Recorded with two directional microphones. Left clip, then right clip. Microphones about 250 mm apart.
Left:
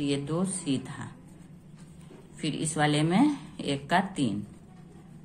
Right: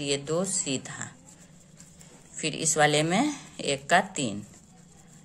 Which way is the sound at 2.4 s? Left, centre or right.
Right.